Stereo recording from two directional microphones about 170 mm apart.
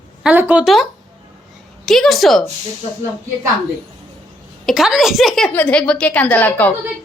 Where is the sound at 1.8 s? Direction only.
Centre (ahead or behind).